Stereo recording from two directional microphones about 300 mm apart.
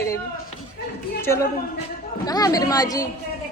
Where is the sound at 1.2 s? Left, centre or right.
Centre.